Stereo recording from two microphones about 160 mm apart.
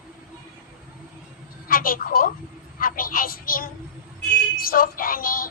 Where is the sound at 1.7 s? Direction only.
65° left (ahead or behind).